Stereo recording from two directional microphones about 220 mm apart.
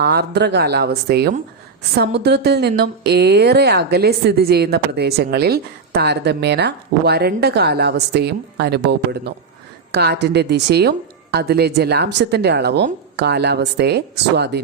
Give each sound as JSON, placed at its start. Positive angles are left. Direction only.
{"t": 0.0, "sound": "a woman's voice", "side_deg": -45}